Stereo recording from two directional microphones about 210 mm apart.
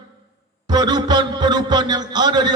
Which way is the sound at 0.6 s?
20° right (ahead or behind).